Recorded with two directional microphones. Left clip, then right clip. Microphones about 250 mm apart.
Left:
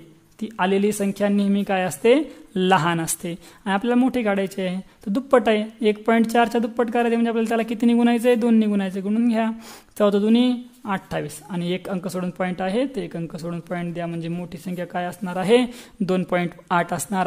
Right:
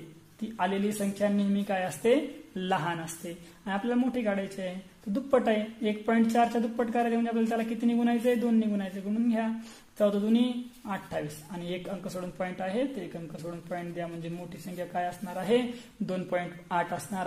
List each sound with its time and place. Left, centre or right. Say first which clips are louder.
0.4 s a woman's voice: left 9 dB; left